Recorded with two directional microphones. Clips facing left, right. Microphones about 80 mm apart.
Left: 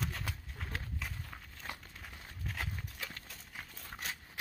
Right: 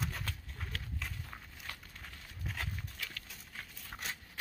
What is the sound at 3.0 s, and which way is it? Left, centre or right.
Clip-clop, left.